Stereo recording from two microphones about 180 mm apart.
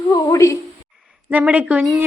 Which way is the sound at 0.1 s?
20° left (ahead or behind).